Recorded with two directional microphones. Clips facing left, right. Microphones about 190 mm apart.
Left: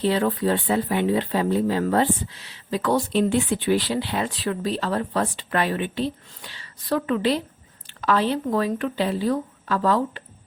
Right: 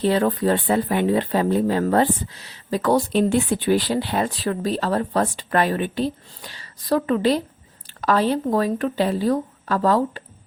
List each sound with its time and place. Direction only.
0.0 s speech: 45° right (ahead or behind)